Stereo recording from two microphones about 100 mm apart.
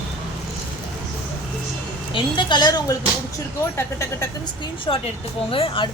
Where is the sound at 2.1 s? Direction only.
55° left (ahead or behind).